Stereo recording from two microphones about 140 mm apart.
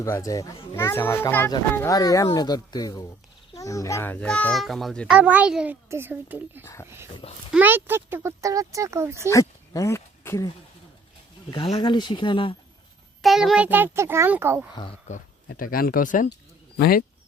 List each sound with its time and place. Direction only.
0.0 s a child's voice: 25° left (ahead or behind); by 9.1 s 20° right (ahead or behind)
9.3 s speech: 25° left (ahead or behind)
11.5 s speech: 40° left (ahead or behind)
13.2 s a child's voice: centre (ahead or behind)
15.0 s speech: 75° left (ahead or behind)